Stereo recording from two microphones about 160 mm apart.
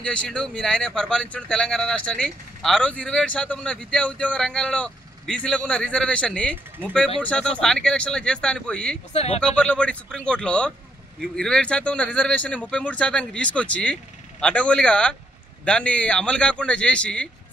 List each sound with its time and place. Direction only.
0.0 s speech: 5° left (ahead or behind)
9.1 s speech: 40° left (ahead or behind)
9.4 s speech: 5° left (ahead or behind)